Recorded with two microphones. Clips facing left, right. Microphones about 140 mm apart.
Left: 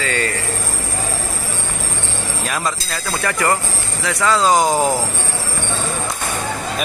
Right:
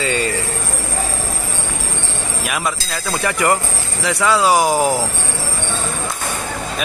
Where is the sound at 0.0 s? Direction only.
20° right (ahead or behind).